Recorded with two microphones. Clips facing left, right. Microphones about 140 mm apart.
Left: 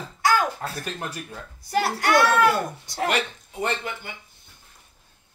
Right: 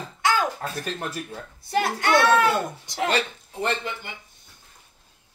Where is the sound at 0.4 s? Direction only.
20° right (ahead or behind).